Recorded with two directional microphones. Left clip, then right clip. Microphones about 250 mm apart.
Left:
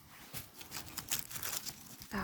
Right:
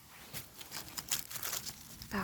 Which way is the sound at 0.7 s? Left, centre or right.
Centre.